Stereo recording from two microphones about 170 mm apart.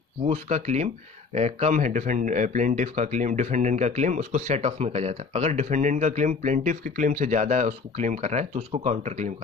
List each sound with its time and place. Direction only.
0.2 s speech: 45° right (ahead or behind)